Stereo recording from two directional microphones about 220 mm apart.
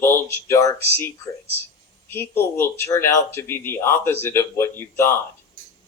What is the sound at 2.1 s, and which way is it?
Speech, 10° left (ahead or behind).